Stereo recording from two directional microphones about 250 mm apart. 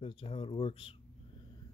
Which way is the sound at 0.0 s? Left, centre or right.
Left.